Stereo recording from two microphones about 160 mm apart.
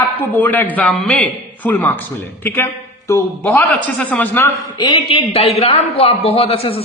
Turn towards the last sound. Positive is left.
turn(degrees=35)  # may be behind; listen again after turning